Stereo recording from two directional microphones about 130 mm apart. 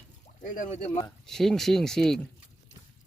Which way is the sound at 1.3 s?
5° left (ahead or behind).